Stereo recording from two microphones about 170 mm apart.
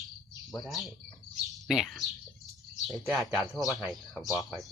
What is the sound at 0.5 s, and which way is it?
Speech, centre (ahead or behind).